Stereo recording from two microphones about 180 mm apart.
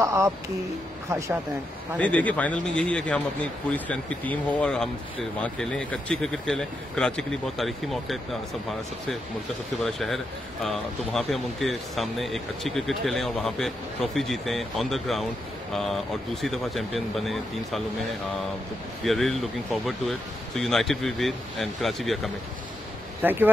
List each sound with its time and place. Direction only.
0.0 s speech: 15° right (ahead or behind)
2.0 s a man's voice: 10° left (ahead or behind)
9.8 s speech: centre (ahead or behind)
19.0 s speech: centre (ahead or behind)
23.2 s speech: 10° right (ahead or behind)